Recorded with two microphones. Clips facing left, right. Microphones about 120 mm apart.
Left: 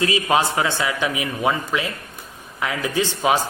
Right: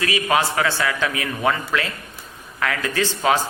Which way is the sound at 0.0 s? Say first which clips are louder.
Left 1 dB; 25° left (ahead or behind).